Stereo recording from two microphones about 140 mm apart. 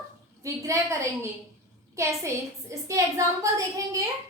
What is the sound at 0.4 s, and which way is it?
A woman's voice, 20° right (ahead or behind).